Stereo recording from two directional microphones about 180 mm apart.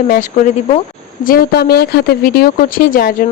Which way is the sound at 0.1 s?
45° left (ahead or behind).